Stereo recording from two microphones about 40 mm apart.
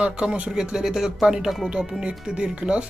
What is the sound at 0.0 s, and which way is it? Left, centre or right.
Speech, centre.